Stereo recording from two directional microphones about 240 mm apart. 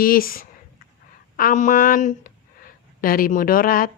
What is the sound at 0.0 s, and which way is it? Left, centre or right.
Speech, left.